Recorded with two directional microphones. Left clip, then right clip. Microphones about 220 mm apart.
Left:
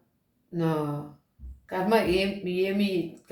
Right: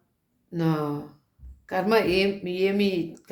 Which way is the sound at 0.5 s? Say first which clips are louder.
Right 1 dB; 45° right (ahead or behind).